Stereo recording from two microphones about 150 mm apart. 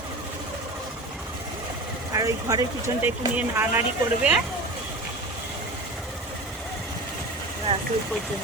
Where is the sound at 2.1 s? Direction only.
25° right (ahead or behind).